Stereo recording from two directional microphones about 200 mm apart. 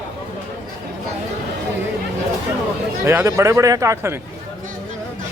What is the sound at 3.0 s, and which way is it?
Speech, 15° right (ahead or behind).